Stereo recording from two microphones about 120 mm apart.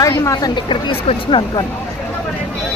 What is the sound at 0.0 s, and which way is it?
Speech, 25° left (ahead or behind).